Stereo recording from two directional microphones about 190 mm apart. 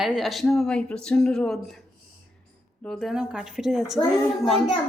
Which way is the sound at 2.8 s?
5° left (ahead or behind).